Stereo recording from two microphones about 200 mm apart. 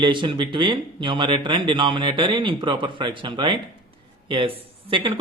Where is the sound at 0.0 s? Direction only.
25° right (ahead or behind).